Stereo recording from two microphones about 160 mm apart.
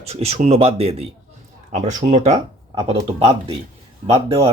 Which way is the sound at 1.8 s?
50° right (ahead or behind).